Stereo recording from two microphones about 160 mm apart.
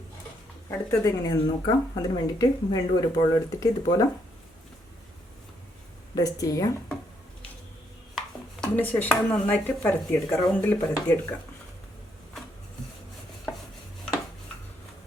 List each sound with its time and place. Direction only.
0.7 s speech: 20° left (ahead or behind)
6.1 s speech: 20° left (ahead or behind)
8.6 s speech: 10° left (ahead or behind)